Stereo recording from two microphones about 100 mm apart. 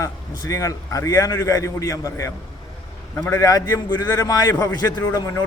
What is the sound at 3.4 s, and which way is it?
A man's voice, 35° left (ahead or behind).